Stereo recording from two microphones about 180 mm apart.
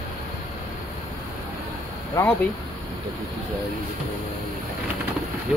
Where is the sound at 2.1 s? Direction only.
10° left (ahead or behind).